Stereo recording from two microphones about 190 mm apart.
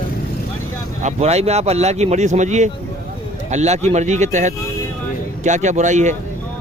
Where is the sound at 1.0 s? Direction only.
35° right (ahead or behind).